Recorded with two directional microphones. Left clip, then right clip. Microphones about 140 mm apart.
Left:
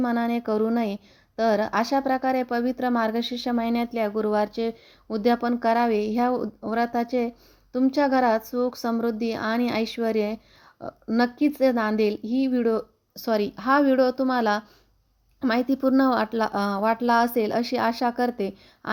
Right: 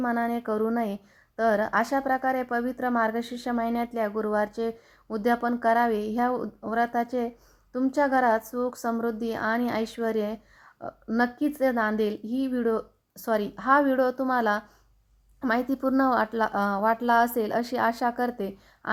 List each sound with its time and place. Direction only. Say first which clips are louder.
0.0 s speech: left 2 dB; 45° left (ahead or behind)
10.8 s a sound: left 1 dB; 40° left (ahead or behind)
11.2 s speech: left 3 dB; 40° left (ahead or behind)